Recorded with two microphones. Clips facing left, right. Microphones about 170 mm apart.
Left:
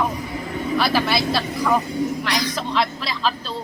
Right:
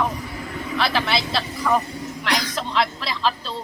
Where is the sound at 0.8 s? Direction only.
5° left (ahead or behind).